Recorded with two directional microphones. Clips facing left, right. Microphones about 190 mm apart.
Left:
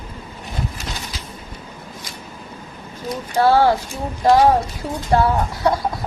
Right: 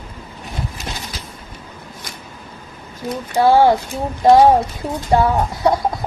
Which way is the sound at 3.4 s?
15° right (ahead or behind).